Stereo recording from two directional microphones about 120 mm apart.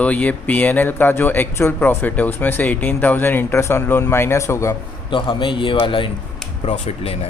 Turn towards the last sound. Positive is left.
turn(degrees=60)  # may be behind; listen again after turning